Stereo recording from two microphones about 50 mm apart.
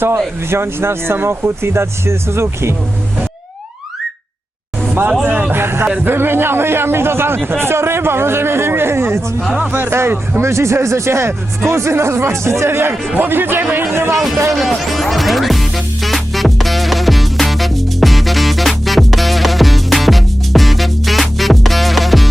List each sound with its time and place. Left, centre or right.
0.5 s speech: right
5.2 s a man's voice: right
10.5 s speech: right
13.1 s a man's voice: right
13.9 s speech: right
14.6 s music: centre